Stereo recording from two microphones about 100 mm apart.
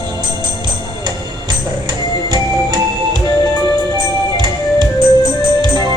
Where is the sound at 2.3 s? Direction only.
45° right (ahead or behind).